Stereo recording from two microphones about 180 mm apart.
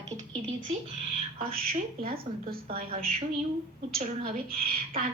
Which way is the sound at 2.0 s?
55° right (ahead or behind).